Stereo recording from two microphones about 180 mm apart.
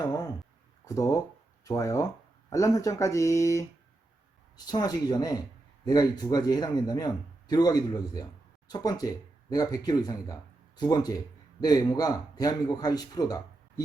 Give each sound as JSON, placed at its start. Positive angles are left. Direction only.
{"t": 0.9, "sound": "a man's voice", "side_deg": 20}